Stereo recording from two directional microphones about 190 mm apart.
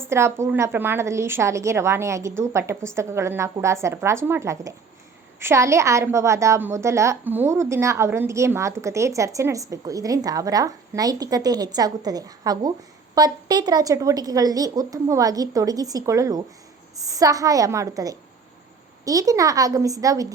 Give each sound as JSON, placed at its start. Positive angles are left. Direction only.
{"t": 0.0, "sound": "a woman's voice", "side_deg": -15}